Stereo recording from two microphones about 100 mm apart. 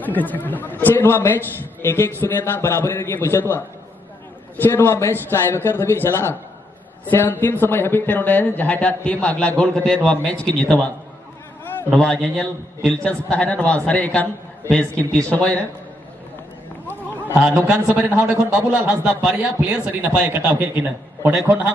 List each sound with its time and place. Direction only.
0.0 s a man's voice: 15° left (ahead or behind)
11.9 s a man's voice: 5° left (ahead or behind)
18.0 s a man's voice: 20° right (ahead or behind)